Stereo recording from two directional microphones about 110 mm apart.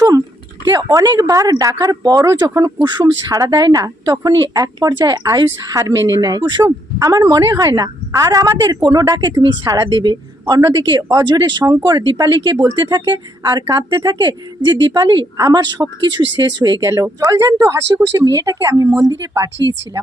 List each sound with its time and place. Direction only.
0.6 s speech: 35° right (ahead or behind)
10.4 s speech: 30° right (ahead or behind)
10.8 s speech: 40° right (ahead or behind)
14.8 s speech: 35° right (ahead or behind)
16.8 s speech: 30° right (ahead or behind)